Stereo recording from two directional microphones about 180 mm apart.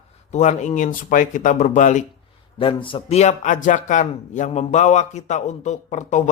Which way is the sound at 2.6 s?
30° left (ahead or behind).